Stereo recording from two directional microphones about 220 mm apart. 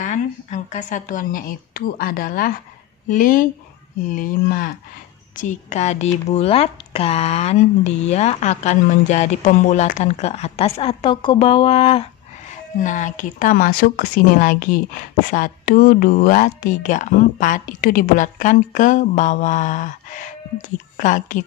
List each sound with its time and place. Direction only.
0.0 s a woman's voice: 35° left (ahead or behind)